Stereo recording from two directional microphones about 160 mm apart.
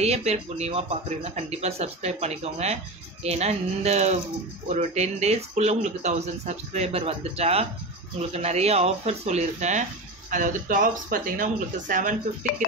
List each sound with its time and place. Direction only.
0.0 s speech: 40° right (ahead or behind)